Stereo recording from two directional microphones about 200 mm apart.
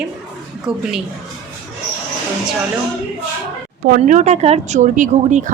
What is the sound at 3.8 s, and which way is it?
Speech, 40° right (ahead or behind).